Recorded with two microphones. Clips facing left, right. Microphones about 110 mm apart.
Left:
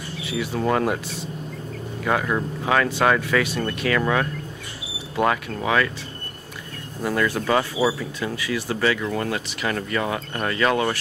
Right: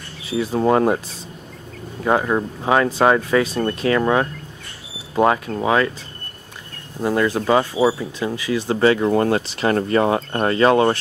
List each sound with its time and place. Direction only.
0.3 s speech: 35° right (ahead or behind)
2.0 s speech: 25° right (ahead or behind)
7.0 s speech: 20° right (ahead or behind)